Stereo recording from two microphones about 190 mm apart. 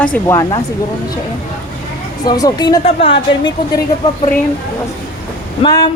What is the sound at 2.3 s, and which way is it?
A woman's voice, 20° left (ahead or behind).